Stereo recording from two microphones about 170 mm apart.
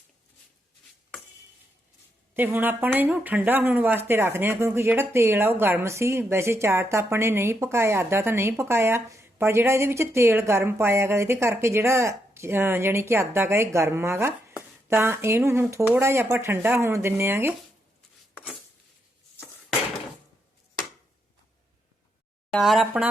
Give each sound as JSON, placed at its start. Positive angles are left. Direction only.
{"t": 2.3, "sound": "speech", "side_deg": -10}
{"t": 22.5, "sound": "speech", "side_deg": 0}